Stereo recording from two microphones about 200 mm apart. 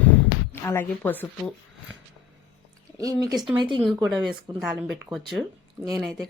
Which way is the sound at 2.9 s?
15° right (ahead or behind).